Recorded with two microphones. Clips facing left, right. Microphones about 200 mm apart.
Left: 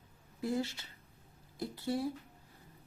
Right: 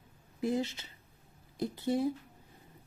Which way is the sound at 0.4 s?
20° right (ahead or behind).